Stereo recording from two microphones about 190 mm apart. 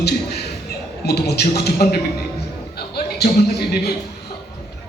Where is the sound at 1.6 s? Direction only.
55° left (ahead or behind).